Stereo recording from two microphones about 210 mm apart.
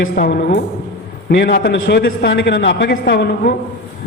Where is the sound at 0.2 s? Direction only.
50° left (ahead or behind).